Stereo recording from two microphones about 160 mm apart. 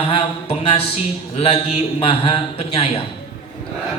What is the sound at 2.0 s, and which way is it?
A man's voice, 35° left (ahead or behind).